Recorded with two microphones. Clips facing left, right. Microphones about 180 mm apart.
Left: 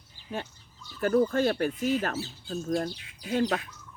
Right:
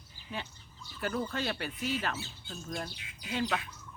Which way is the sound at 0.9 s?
45° left (ahead or behind).